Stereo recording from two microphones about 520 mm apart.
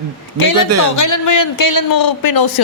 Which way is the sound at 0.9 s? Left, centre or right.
Left.